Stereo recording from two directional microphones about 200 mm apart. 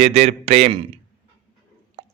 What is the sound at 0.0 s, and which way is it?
Speech, 30° right (ahead or behind).